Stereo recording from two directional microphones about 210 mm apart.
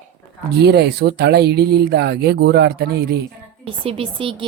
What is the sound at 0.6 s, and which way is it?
Speech, 50° right (ahead or behind).